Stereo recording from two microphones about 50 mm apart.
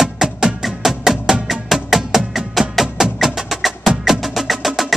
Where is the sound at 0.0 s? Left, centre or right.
Centre.